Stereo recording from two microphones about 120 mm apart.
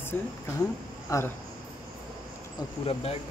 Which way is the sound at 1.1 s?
25° left (ahead or behind).